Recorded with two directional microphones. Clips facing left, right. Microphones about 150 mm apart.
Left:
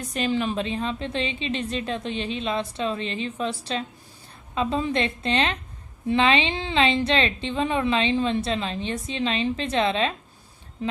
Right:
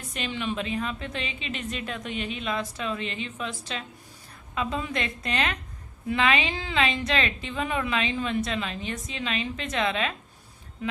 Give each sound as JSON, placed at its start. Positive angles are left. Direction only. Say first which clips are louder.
{"t": 0.1, "sound": "a woman's voice", "louder": "left 6 dB", "side_deg": 35}